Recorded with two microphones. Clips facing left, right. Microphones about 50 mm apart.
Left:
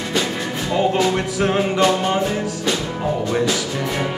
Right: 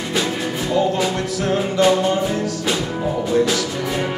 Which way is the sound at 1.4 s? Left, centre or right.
Left.